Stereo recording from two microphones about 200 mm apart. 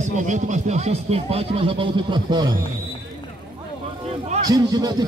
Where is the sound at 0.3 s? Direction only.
35° right (ahead or behind).